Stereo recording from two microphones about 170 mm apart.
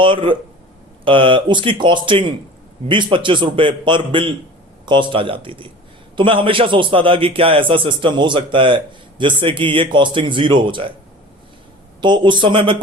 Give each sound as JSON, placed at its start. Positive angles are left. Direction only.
{"t": 0.0, "sound": "a man's voice", "side_deg": -30}
{"t": 11.9, "sound": "a man's voice", "side_deg": -25}